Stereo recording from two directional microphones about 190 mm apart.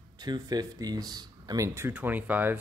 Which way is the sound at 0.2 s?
20° right (ahead or behind).